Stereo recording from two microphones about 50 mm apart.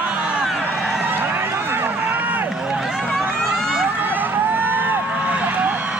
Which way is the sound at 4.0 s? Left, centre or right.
Right.